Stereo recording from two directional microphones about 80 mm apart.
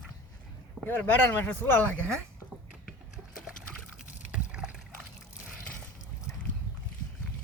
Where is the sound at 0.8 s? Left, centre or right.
Left.